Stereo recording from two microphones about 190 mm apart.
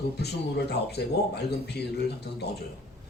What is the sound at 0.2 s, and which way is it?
Speech, 60° left (ahead or behind).